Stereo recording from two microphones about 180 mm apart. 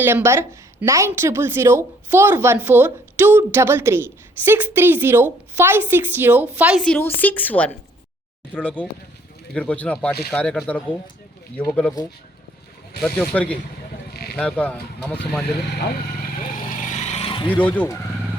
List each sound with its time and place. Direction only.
0.0 s a woman's voice: 10° right (ahead or behind)
6.8 s speech: 5° left (ahead or behind)
13.0 s speech: 5° left (ahead or behind)
16.2 s vehicle: 50° left (ahead or behind); by 17.5 s 30° left (ahead or behind)
17.5 s speech: 10° left (ahead or behind)